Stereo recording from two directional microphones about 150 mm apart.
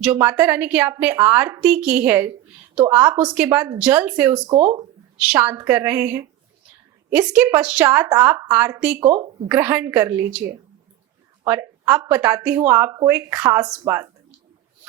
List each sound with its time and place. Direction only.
0.0 s a woman's voice: 10° right (ahead or behind)
4.4 s speech: 30° right (ahead or behind)
5.2 s a woman's voice: 10° right (ahead or behind)
11.4 s a woman's voice: 15° right (ahead or behind)